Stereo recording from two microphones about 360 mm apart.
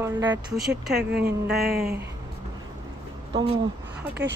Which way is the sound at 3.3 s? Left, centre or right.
Centre.